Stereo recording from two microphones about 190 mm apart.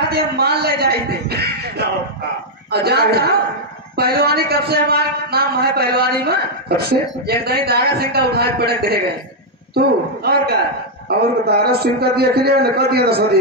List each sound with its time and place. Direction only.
0.0 s a man's voice: 55° right (ahead or behind)